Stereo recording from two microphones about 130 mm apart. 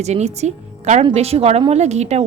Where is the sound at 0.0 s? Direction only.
60° right (ahead or behind).